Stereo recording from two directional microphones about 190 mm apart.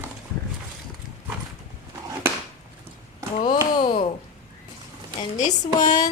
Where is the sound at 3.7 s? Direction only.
25° left (ahead or behind).